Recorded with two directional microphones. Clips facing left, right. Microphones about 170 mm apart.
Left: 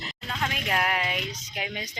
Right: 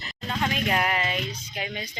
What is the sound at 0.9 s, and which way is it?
Music, 10° left (ahead or behind).